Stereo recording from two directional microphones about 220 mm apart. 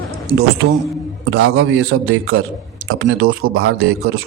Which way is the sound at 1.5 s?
65° right (ahead or behind).